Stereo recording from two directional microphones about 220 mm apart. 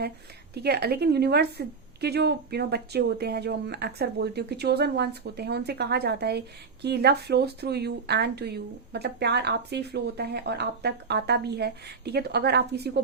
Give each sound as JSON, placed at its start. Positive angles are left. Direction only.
{"t": 0.5, "sound": "speech", "side_deg": -45}